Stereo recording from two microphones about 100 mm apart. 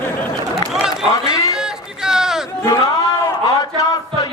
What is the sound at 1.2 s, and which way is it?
Speech, 35° left (ahead or behind).